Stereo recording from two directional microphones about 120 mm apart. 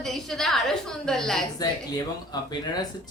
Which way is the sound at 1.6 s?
35° left (ahead or behind).